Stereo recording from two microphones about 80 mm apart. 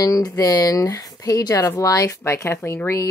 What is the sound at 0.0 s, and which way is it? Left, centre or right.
Speech, left.